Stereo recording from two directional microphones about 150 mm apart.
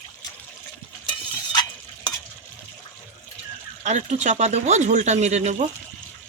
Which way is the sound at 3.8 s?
50° right (ahead or behind).